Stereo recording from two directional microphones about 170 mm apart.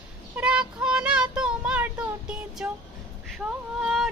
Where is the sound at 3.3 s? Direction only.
Centre (ahead or behind).